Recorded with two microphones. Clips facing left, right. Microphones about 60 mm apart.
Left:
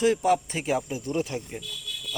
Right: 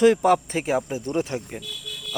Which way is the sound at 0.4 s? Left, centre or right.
Right.